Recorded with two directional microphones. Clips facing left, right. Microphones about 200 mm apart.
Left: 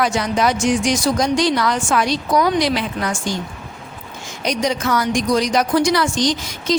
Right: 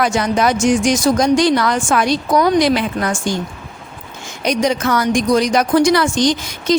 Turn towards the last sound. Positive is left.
turn(degrees=-55)  # may be behind; listen again after turning